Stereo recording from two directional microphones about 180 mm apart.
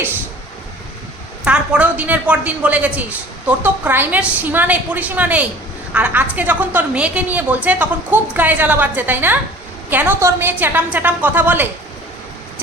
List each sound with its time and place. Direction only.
1.5 s speech: 5° right (ahead or behind)